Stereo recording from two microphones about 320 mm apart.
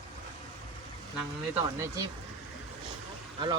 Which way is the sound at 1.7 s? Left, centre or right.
Centre.